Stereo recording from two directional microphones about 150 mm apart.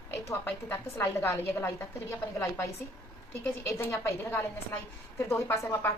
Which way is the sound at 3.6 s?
15° left (ahead or behind).